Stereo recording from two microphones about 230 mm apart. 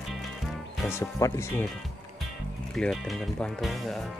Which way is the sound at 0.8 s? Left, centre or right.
Centre.